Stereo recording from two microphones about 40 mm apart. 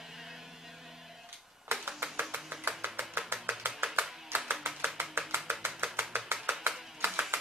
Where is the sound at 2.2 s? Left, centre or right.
Right.